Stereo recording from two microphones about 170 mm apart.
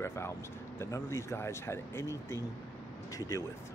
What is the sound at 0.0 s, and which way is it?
Speech, 15° left (ahead or behind).